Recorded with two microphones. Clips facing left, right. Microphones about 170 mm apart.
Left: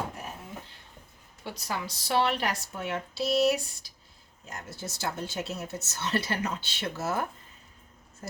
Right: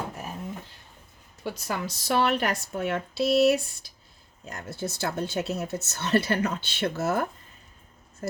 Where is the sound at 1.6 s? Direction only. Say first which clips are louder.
Right 2 dB; 50° right (ahead or behind).